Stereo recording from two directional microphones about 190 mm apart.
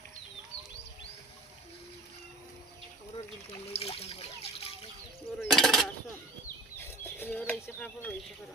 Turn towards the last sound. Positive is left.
turn(degrees=10)  # may be behind; listen again after turning